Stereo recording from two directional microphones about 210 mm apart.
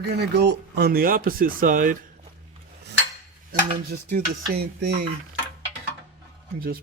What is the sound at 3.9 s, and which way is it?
Speech, 45° right (ahead or behind).